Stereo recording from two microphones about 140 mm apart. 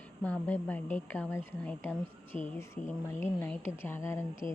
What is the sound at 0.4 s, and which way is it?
A woman's voice, 10° left (ahead or behind).